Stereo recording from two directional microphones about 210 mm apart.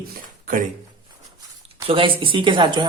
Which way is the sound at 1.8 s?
25° right (ahead or behind).